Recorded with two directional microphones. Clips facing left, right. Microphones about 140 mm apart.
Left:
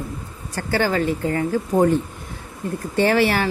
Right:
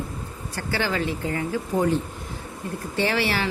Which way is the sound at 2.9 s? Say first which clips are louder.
Left 6 dB; 50° left (ahead or behind).